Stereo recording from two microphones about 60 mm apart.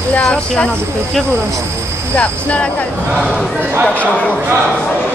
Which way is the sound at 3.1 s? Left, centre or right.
Centre.